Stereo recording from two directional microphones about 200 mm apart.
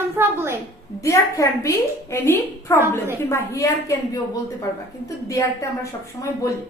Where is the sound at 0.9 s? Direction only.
15° left (ahead or behind).